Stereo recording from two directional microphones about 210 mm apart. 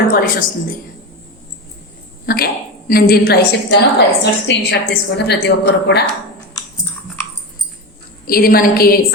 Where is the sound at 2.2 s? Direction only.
45° left (ahead or behind).